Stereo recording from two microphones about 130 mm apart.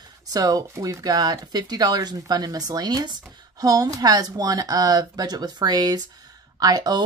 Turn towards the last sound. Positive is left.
turn(degrees=-30)  # may be behind; listen again after turning